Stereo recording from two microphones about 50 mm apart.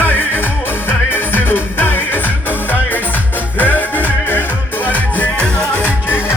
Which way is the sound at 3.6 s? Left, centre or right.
Left.